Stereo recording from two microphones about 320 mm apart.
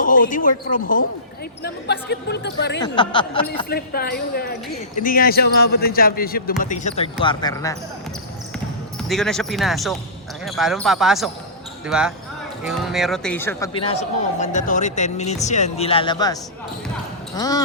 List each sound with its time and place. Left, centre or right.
0.0 s a sound: left
0.7 s a man's voice: left
2.8 s speech: centre
3.7 s a man's voice: left; by 7.8 s centre
9.0 s speech: centre